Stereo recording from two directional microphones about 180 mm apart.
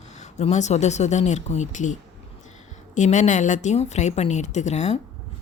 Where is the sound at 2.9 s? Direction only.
40° left (ahead or behind).